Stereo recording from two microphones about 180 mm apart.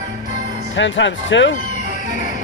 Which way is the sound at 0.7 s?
90° left.